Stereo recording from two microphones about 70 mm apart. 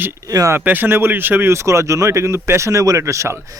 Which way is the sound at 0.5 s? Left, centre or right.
Right.